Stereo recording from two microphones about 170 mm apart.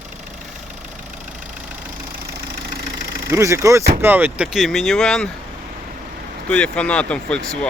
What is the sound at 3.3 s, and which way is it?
Speech, 15° right (ahead or behind).